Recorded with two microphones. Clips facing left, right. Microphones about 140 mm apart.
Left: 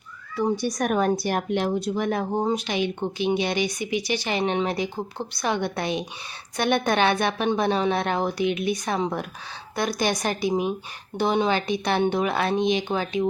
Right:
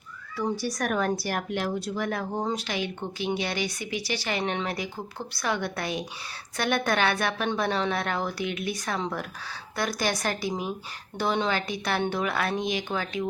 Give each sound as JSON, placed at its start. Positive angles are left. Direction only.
{"t": 0.4, "sound": "speech", "side_deg": 20}